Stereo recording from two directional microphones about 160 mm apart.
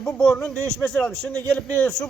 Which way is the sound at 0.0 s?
5° left (ahead or behind).